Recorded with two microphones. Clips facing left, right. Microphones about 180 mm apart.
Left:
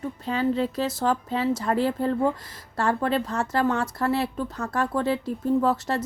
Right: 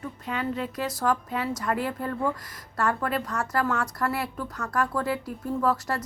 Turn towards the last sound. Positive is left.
turn(degrees=25)  # may be behind; listen again after turning